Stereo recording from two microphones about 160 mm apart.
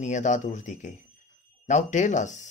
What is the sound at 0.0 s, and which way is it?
Speech, 50° left (ahead or behind).